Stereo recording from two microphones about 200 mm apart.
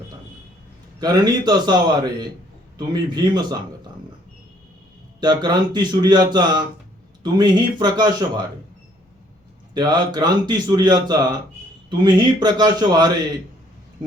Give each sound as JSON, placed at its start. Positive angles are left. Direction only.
{"t": 0.9, "sound": "speech", "side_deg": -20}
{"t": 5.2, "sound": "speech", "side_deg": -20}
{"t": 9.7, "sound": "speech", "side_deg": -20}